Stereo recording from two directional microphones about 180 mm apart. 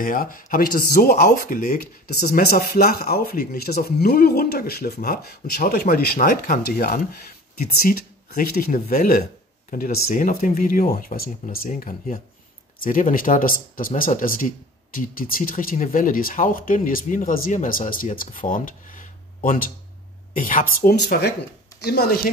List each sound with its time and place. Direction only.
0.0 s speech: 50° left (ahead or behind)